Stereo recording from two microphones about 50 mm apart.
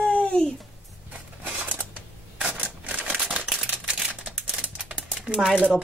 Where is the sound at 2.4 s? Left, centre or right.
Centre.